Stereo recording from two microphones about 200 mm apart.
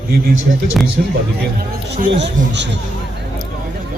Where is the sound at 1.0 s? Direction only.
45° right (ahead or behind).